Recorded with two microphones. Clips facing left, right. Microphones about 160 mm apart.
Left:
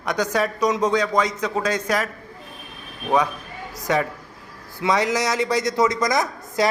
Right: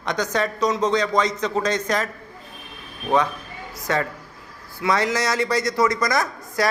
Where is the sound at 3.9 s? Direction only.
15° left (ahead or behind).